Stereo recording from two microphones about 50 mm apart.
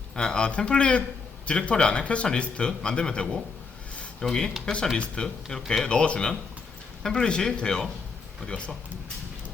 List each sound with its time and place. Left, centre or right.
0.2 s speech: centre